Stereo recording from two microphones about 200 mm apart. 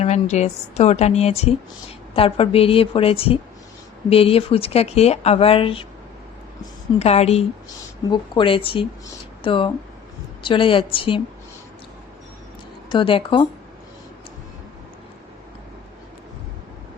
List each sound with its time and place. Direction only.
0.0 s a woman's voice: 35° left (ahead or behind)
7.0 s a woman's voice: 30° left (ahead or behind)
12.9 s speech: 25° left (ahead or behind)